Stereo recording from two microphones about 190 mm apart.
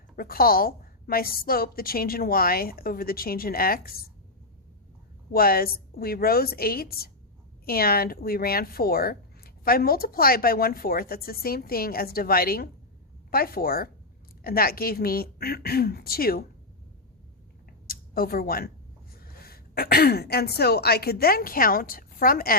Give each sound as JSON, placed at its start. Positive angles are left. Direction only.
{"t": 0.2, "sound": "speech", "side_deg": 50}
{"t": 5.3, "sound": "speech", "side_deg": 50}
{"t": 17.7, "sound": "a sound", "side_deg": 50}
{"t": 19.1, "sound": "speech", "side_deg": 50}